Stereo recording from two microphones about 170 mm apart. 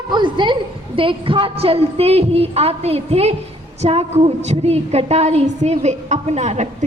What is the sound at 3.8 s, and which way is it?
A woman's voice, 35° right (ahead or behind).